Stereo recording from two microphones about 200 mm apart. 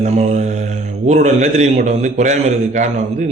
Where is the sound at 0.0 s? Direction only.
35° right (ahead or behind).